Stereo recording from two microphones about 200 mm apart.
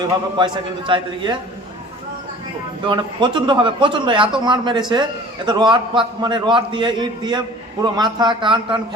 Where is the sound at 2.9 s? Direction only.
25° right (ahead or behind).